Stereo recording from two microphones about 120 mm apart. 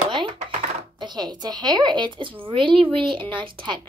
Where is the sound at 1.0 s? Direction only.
35° right (ahead or behind).